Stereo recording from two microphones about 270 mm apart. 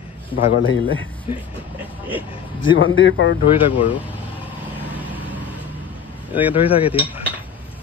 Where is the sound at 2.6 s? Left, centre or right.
Left.